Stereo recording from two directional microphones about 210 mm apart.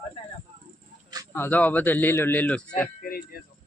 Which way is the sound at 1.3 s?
10° left (ahead or behind).